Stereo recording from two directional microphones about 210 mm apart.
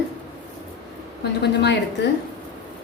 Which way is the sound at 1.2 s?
50° left (ahead or behind).